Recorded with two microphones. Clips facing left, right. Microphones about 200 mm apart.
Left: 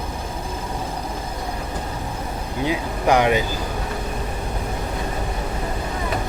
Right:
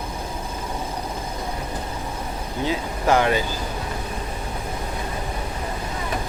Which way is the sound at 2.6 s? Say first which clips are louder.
Left 2 dB; 15° left (ahead or behind).